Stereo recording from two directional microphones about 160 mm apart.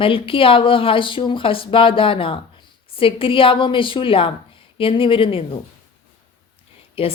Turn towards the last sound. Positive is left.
turn(degrees=35)  # may be behind; listen again after turning